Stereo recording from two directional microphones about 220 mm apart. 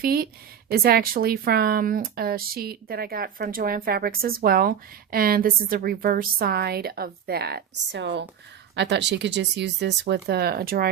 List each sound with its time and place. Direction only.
0.0 s speech: 45° right (ahead or behind)